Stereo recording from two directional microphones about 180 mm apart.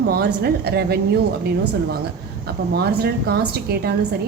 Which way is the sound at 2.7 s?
60° right (ahead or behind).